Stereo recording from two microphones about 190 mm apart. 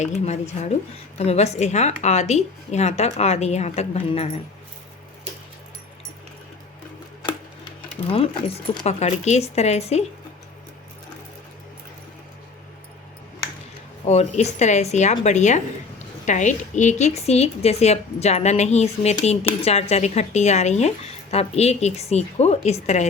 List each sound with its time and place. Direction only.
0.0 s speech: 35° left (ahead or behind)
7.3 s speech: 25° left (ahead or behind)
14.1 s speech: 35° left (ahead or behind)